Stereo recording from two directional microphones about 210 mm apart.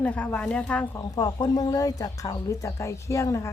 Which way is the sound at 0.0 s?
5° left (ahead or behind).